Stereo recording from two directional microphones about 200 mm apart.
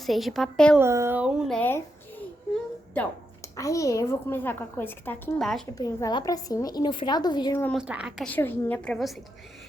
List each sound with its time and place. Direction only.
0.0 s a woman's voice: centre (ahead or behind)
0.8 s a woman's voice: 15° right (ahead or behind); by 2.2 s 10° left (ahead or behind)
3.6 s a woman's voice: 15° left (ahead or behind)
5.7 s a woman's voice: 20° left (ahead or behind)
7.8 s a woman's voice: 5° right (ahead or behind)
8.3 s a woman's voice: 10° left (ahead or behind)